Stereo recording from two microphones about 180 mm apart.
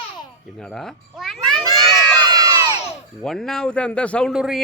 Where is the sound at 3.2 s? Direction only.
Centre (ahead or behind).